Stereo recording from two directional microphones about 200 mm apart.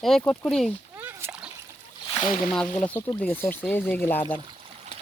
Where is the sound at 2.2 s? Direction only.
40° left (ahead or behind).